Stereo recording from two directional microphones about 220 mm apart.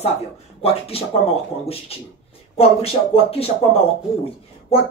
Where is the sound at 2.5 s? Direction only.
25° left (ahead or behind).